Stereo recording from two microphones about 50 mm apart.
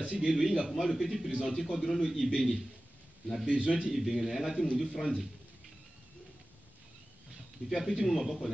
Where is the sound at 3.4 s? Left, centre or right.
Right.